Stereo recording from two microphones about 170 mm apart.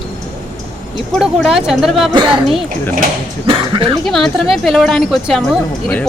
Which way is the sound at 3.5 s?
30° right (ahead or behind).